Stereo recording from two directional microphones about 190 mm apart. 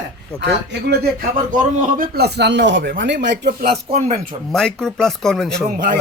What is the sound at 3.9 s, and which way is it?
Speech, 35° right (ahead or behind).